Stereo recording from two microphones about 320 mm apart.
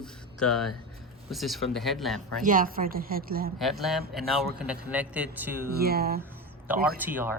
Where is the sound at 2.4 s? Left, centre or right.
Right.